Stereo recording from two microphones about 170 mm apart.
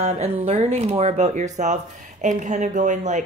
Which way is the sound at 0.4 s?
40° right (ahead or behind).